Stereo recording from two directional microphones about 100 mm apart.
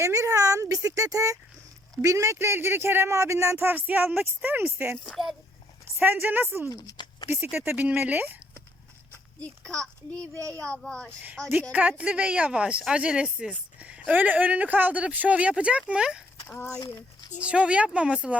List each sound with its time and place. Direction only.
0.0 s speech: 35° right (ahead or behind)
5.0 s speech: centre (ahead or behind)
6.0 s speech: 20° right (ahead or behind)
6.7 s speech: 35° left (ahead or behind)
6.9 s a sound: 50° left (ahead or behind)
7.5 s speech: 20° right (ahead or behind)
9.4 s a child's voice: 5° left (ahead or behind)
11.7 s speech: 15° right (ahead or behind)
17.4 s speech: 10° right (ahead or behind)